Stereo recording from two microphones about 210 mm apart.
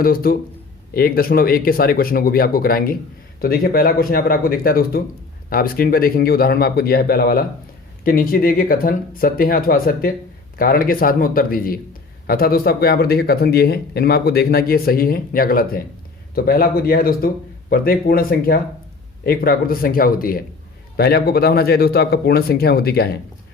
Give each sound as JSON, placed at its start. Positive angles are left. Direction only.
{"t": 0.0, "sound": "speech", "side_deg": 45}